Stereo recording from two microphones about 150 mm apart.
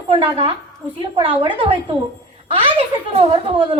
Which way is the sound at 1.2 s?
35° right (ahead or behind).